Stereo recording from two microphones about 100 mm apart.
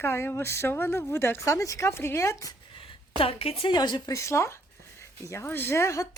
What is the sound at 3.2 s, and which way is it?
Speech, 75° left (ahead or behind).